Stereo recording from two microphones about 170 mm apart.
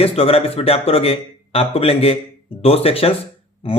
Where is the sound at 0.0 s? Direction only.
35° left (ahead or behind).